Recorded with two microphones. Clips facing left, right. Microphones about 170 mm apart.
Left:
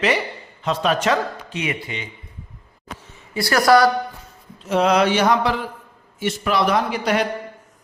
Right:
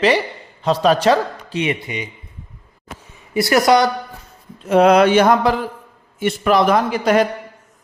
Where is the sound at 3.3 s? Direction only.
20° right (ahead or behind).